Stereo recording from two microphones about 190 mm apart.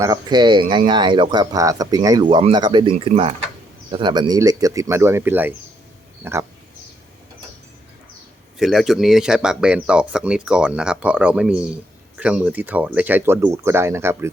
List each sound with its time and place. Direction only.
0.0 s speech: 20° right (ahead or behind)
8.5 s speech: centre (ahead or behind)